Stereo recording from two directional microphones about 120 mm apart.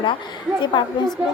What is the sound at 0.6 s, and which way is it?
Speech, 40° left (ahead or behind).